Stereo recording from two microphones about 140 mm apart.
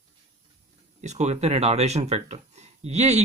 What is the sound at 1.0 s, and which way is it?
Speech, 55° right (ahead or behind).